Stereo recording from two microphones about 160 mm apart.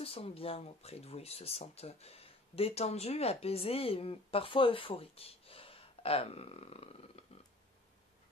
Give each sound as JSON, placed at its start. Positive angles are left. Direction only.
{"t": 0.0, "sound": "speech", "side_deg": 35}